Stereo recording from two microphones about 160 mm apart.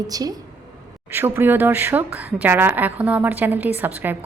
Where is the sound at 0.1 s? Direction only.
25° right (ahead or behind).